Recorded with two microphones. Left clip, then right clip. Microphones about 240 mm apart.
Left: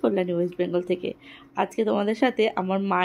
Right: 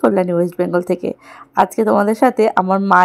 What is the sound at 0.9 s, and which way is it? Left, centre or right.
Speech, right.